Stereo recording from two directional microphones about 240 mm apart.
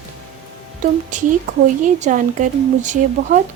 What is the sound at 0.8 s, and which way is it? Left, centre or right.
Speech, right.